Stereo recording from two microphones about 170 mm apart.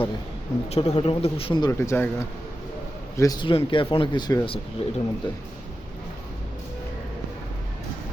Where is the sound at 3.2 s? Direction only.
25° left (ahead or behind).